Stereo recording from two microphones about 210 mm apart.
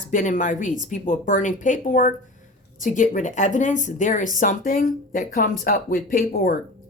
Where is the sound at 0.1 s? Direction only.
35° left (ahead or behind).